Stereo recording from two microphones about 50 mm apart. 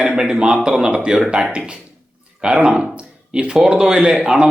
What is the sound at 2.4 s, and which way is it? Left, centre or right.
Speech, centre.